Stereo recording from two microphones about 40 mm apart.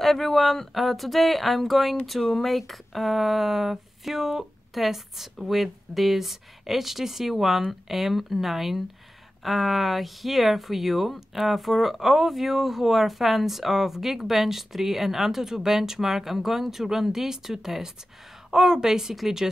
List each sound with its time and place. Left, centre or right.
0.0 s a woman's voice: centre